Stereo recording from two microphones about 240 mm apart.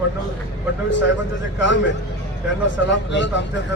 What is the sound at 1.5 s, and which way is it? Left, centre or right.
Speech, left.